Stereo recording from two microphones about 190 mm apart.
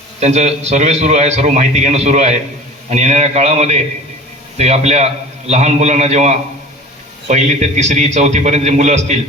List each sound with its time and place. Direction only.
0.2 s a man's voice: 35° right (ahead or behind)